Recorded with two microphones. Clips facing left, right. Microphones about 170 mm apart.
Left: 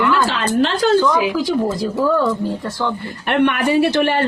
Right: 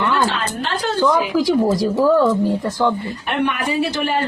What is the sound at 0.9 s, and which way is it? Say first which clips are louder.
Speech: left 1 dB; 15° right (ahead or behind).